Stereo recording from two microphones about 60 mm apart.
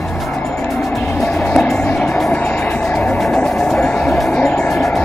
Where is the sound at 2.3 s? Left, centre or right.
Left.